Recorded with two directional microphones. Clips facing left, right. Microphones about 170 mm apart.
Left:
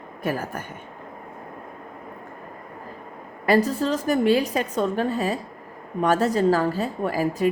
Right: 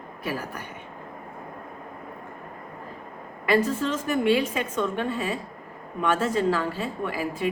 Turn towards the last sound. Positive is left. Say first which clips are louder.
# left 5 dB
turn(degrees=40)  # may be behind; listen again after turning